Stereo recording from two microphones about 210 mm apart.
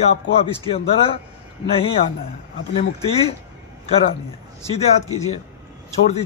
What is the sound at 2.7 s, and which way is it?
Speech, 30° left (ahead or behind).